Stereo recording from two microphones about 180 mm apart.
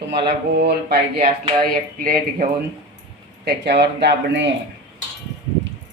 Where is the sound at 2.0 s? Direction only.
50° right (ahead or behind).